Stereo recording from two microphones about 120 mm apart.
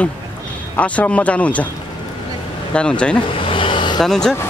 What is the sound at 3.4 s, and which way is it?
Vehicle, 45° left (ahead or behind).